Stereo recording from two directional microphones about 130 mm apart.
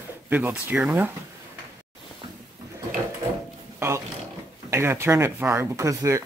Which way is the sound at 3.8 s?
25° right (ahead or behind).